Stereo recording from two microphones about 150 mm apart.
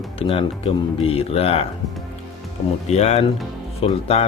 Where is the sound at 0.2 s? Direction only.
40° left (ahead or behind).